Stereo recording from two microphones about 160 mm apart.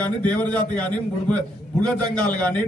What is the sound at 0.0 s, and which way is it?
A man's voice, 5° left (ahead or behind).